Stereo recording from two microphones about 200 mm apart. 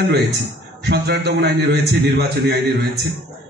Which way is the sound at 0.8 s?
55° right (ahead or behind).